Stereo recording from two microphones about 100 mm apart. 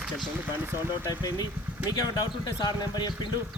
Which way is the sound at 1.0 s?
40° left (ahead or behind).